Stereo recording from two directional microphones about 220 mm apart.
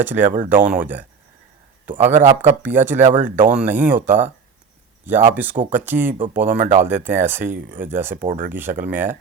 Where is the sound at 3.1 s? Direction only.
40° right (ahead or behind).